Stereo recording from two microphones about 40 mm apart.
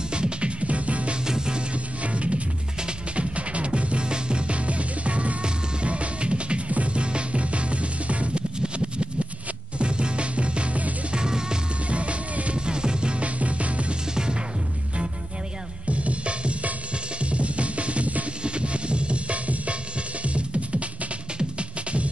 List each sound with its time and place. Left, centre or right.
0.1 s music: right
1.2 s music: centre
2.0 s music: right
8.5 s a sound: right
9.8 s music: right
11.1 s music: centre
11.9 s music: right
13.2 s music: right
14.1 s music: right
15.9 s music: right